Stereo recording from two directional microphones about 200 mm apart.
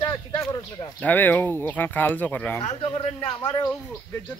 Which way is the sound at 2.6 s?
30° left (ahead or behind).